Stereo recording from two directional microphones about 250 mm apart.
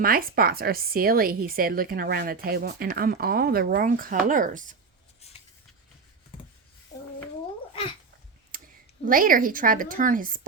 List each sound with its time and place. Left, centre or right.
0.0 s a woman's voice: right
8.5 s a sound: right
9.0 s a woman's voice: right